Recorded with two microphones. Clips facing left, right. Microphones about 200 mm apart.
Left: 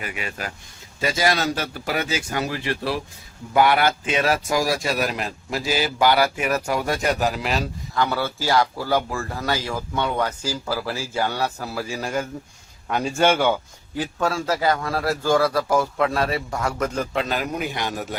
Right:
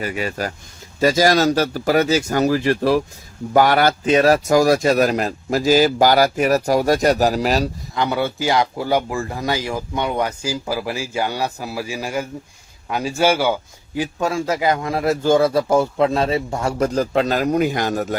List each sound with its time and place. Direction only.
0.0 s speech: 40° right (ahead or behind)
7.9 s a man's voice: 20° right (ahead or behind); by 18.2 s 45° right (ahead or behind)